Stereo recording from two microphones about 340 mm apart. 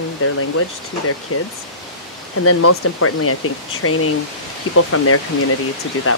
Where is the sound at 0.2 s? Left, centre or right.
Left.